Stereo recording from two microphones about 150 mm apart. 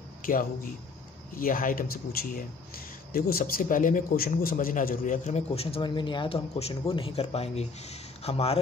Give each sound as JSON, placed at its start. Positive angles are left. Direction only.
{"t": 0.2, "sound": "a man's voice", "side_deg": 70}